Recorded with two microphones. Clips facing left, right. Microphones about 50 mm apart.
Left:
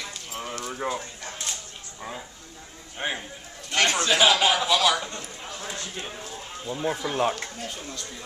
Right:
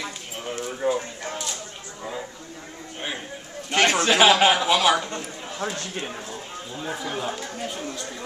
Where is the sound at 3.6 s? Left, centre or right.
Right.